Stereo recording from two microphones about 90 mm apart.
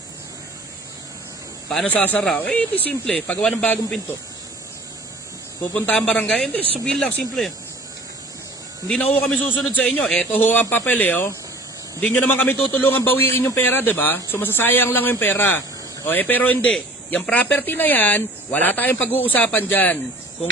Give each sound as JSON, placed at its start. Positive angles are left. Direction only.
{"t": 1.9, "sound": "speech", "side_deg": 20}
{"t": 5.8, "sound": "speech", "side_deg": 10}
{"t": 8.8, "sound": "speech", "side_deg": 5}
{"t": 9.7, "sound": "a man's voice", "side_deg": 15}
{"t": 16.6, "sound": "speech", "side_deg": 10}
{"t": 17.3, "sound": "a man's voice", "side_deg": 20}